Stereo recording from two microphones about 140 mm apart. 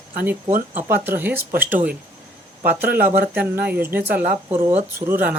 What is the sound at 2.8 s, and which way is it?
Speech, 90° right.